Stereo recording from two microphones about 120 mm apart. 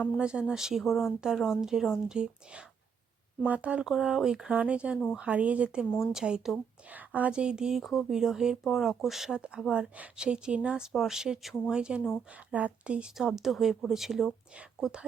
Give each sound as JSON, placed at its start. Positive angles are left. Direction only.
{"t": 0.2, "sound": "a woman's voice", "side_deg": -10}
{"t": 5.9, "sound": "a woman's voice", "side_deg": 20}
{"t": 6.1, "sound": "a woman's voice", "side_deg": -5}